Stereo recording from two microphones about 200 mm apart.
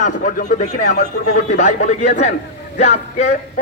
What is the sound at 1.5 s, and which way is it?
A man's voice, 35° left (ahead or behind).